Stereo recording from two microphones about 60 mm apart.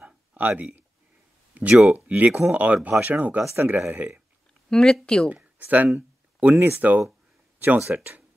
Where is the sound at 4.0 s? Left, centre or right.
Right.